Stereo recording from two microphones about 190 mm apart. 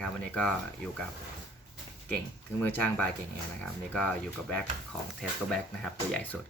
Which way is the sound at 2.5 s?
5° left (ahead or behind).